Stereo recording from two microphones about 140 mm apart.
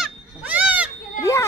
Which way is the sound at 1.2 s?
20° left (ahead or behind).